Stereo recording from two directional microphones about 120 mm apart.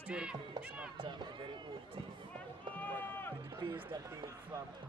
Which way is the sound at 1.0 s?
40° right (ahead or behind).